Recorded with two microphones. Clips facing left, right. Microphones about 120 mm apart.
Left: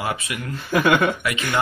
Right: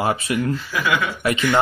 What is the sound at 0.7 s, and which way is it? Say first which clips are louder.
Speech: left 4 dB; 55° left (ahead or behind).